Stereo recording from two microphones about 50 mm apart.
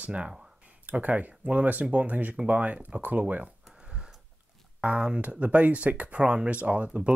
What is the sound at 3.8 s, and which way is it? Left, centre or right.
Sniff, centre.